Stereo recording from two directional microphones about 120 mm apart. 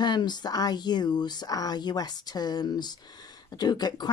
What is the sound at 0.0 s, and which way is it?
Speech, 35° left (ahead or behind).